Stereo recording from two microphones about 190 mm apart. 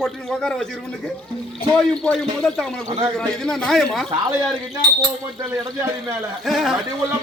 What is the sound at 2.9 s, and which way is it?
Speech, 15° right (ahead or behind).